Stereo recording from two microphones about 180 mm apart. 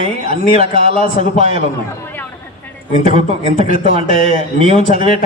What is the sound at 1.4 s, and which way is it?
Speech, 35° right (ahead or behind).